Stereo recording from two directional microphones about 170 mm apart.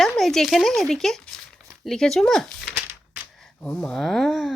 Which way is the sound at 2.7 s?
10° right (ahead or behind).